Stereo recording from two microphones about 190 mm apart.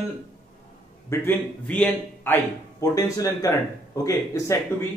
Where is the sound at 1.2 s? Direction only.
10° left (ahead or behind).